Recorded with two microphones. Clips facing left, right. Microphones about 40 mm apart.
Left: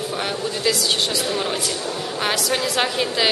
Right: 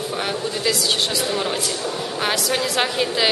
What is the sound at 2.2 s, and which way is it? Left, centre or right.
A woman's voice, centre.